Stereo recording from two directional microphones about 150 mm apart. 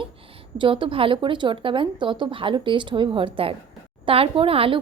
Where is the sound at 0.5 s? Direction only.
35° right (ahead or behind).